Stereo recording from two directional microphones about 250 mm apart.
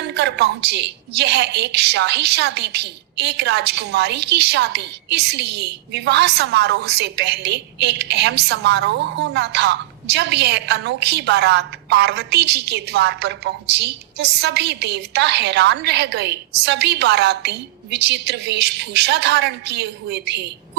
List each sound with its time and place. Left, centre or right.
0.1 s a woman's voice: right